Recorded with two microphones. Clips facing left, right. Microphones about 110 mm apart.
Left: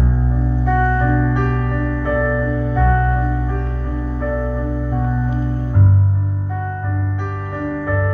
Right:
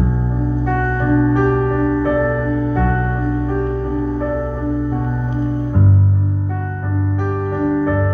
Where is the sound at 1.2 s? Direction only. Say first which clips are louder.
Right 5 dB; 20° right (ahead or behind).